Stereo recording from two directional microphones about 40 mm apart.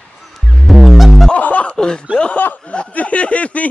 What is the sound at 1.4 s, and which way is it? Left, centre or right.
Speech, left.